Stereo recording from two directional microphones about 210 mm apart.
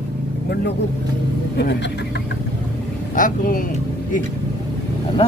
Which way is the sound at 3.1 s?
40° left (ahead or behind).